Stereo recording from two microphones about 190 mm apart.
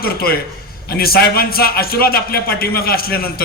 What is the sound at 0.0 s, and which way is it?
A man's voice, 50° left (ahead or behind).